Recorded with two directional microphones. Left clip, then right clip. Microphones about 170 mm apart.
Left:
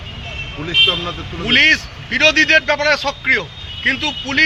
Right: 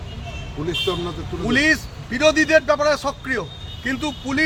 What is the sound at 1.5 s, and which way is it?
A man's voice, 25° right (ahead or behind).